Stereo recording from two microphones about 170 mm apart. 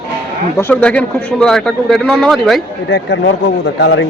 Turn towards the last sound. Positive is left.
turn(degrees=90)